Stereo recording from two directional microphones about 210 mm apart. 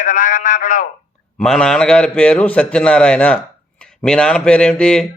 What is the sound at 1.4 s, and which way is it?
A man's voice, 5° left (ahead or behind).